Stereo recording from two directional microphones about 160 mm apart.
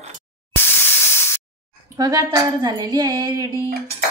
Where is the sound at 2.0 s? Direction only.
20° right (ahead or behind).